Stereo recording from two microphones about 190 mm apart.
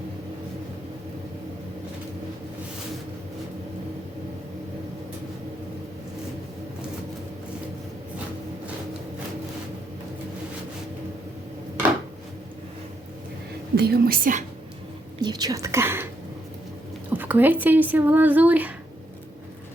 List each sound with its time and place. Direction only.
13.7 s a woman's voice: 55° right (ahead or behind)
15.2 s speech: 20° right (ahead or behind)
17.1 s speech: 10° right (ahead or behind)